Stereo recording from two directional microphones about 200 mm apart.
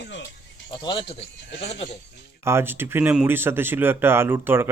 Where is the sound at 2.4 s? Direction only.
10° right (ahead or behind).